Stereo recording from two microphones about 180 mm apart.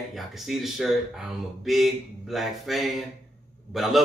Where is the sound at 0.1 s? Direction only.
Centre (ahead or behind).